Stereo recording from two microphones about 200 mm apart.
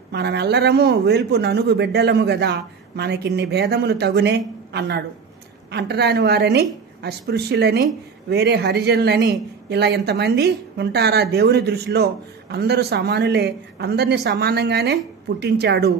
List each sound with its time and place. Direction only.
0.1 s speech: 55° right (ahead or behind)